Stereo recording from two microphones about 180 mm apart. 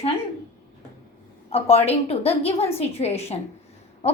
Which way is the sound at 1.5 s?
35° left (ahead or behind).